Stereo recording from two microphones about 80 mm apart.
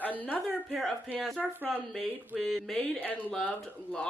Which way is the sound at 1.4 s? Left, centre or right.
Centre.